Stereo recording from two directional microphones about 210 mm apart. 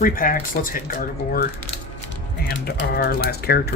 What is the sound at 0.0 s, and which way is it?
Speech, 40° left (ahead or behind).